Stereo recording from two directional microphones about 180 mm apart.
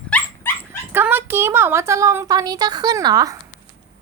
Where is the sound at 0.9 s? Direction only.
10° right (ahead or behind).